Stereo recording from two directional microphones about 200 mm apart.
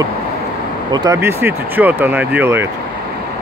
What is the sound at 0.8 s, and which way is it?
Speech, 20° right (ahead or behind).